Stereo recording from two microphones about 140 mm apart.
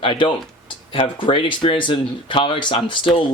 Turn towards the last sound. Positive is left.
turn(degrees=35)  # may be behind; listen again after turning